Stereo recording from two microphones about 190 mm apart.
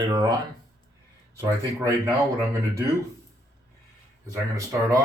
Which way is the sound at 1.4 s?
15° right (ahead or behind).